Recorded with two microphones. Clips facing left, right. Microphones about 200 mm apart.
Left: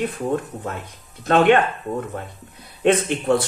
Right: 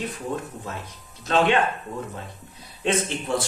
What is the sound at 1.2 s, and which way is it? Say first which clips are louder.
Speech: left 6 dB; 55° left (ahead or behind).